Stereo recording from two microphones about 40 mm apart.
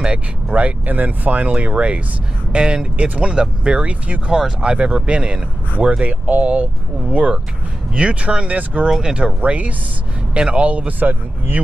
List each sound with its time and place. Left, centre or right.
0.0 s speech: right
0.8 s speech: right
1.5 s speech: right
9.4 s speech: right